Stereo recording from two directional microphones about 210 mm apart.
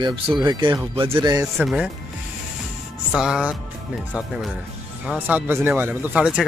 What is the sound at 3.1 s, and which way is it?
Speech, 5° right (ahead or behind).